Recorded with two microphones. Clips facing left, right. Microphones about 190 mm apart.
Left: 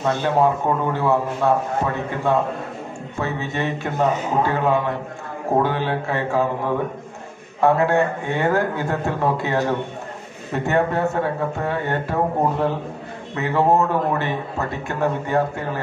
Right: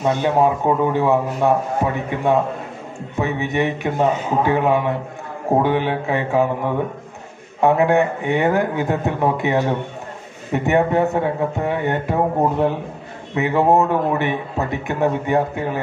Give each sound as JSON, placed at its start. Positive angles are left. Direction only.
{"t": 0.0, "sound": "a man's voice", "side_deg": -15}
{"t": 3.2, "sound": "a man's voice", "side_deg": -15}
{"t": 7.6, "sound": "a man's voice", "side_deg": -20}